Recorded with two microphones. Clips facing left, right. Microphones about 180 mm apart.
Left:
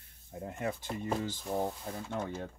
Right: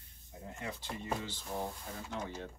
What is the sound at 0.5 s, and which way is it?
Speech, 50° left (ahead or behind).